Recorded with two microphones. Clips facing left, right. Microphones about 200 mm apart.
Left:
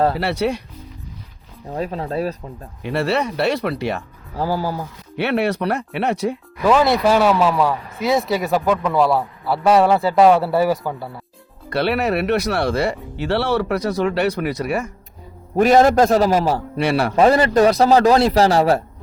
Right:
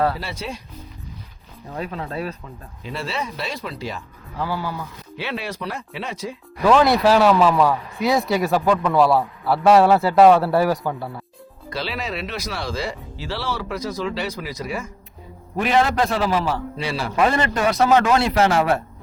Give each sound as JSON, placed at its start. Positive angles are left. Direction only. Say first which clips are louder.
{"t": 0.2, "sound": "speech", "louder": "left 11 dB", "side_deg": 70}
{"t": 1.7, "sound": "a man's voice", "louder": "left 5 dB", "side_deg": 35}
{"t": 2.8, "sound": "speech", "louder": "left 8 dB", "side_deg": 65}
{"t": 4.4, "sound": "a man's voice", "louder": "left 5 dB", "side_deg": 40}
{"t": 5.1, "sound": "speech", "louder": "left 10 dB", "side_deg": 65}
{"t": 6.7, "sound": "a man's voice", "louder": "even", "side_deg": 0}
{"t": 11.7, "sound": "speech", "louder": "left 9 dB", "side_deg": 60}
{"t": 15.5, "sound": "a man's voice", "louder": "left 7 dB", "side_deg": 45}
{"t": 16.7, "sound": "speech", "louder": "left 8 dB", "side_deg": 65}
{"t": 17.2, "sound": "a man's voice", "louder": "left 6 dB", "side_deg": 35}